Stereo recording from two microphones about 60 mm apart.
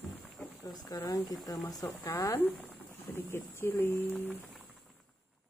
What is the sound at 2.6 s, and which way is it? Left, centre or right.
Speech, left.